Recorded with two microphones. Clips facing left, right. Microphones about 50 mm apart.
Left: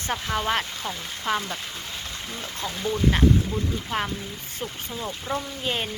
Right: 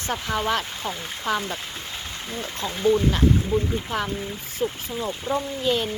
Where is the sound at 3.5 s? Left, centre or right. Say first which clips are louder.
Right 6 dB; right.